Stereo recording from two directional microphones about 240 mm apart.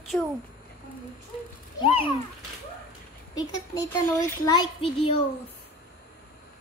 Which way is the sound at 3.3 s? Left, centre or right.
Centre.